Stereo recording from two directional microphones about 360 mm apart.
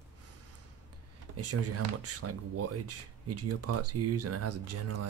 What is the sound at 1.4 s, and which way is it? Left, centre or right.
Speech, right.